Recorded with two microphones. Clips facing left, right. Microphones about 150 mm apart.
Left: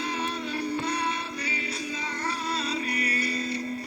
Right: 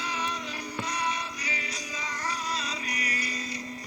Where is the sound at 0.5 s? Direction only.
30° left (ahead or behind).